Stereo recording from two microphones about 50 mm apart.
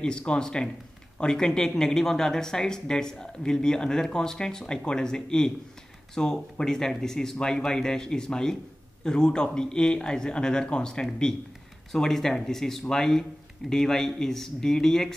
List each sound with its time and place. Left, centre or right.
0.0 s speech: centre